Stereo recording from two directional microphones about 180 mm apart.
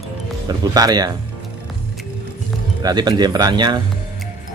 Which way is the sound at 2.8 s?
25° right (ahead or behind).